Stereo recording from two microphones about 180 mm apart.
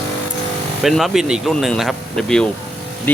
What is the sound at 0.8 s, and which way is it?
Speech, centre (ahead or behind).